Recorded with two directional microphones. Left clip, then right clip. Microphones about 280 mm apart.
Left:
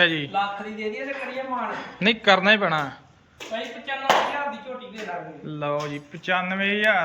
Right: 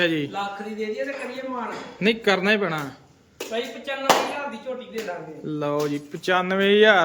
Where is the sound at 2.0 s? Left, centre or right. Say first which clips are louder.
Left 2 dB; centre.